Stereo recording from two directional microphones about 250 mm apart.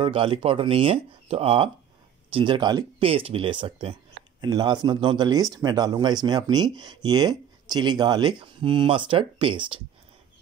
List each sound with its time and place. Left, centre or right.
0.0 s speech: right